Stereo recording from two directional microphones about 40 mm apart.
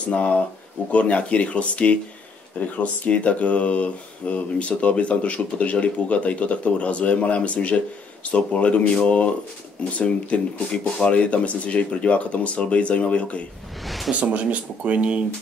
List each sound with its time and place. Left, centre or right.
0.1 s speech: left
13.8 s speech: centre
14.3 s speech: right